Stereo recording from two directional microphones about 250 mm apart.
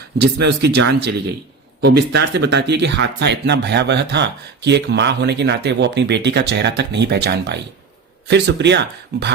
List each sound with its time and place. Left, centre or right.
0.2 s speech: right